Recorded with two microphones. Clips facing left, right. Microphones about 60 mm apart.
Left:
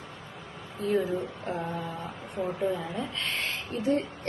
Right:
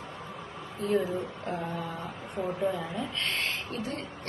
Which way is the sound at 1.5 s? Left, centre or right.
Centre.